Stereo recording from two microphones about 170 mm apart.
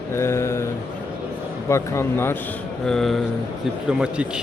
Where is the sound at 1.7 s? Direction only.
15° left (ahead or behind).